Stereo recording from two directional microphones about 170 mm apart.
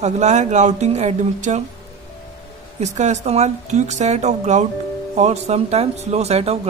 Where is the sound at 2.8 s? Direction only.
40° right (ahead or behind).